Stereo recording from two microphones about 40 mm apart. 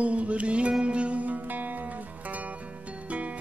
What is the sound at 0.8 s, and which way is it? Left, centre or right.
Music, right.